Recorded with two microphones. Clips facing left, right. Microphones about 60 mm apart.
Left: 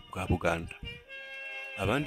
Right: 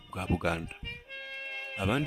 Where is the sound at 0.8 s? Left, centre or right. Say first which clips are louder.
Right 2 dB; right.